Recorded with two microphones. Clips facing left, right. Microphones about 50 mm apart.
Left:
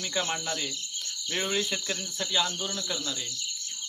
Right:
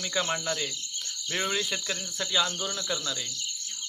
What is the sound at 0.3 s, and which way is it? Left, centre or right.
Cricket, centre.